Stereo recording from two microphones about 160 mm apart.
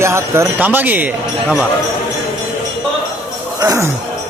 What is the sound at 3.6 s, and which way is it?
Speech, 20° right (ahead or behind).